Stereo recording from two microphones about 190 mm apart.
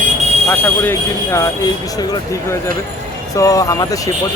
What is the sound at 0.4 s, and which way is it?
A man's voice, 10° left (ahead or behind).